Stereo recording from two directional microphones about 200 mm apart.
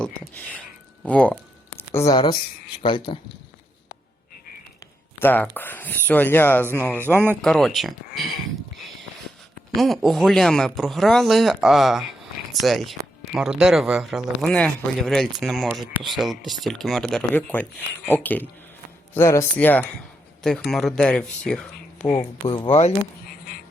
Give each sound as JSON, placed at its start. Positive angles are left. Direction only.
{"t": 0.0, "sound": "speech", "side_deg": 10}
{"t": 2.8, "sound": "speech", "side_deg": 25}
{"t": 5.2, "sound": "speech", "side_deg": 10}
{"t": 22.2, "sound": "speech", "side_deg": 25}